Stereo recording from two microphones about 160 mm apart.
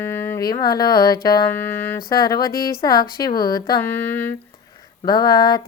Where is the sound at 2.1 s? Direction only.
25° left (ahead or behind).